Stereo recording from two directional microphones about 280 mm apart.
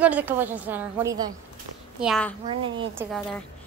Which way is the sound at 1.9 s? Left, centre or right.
Centre.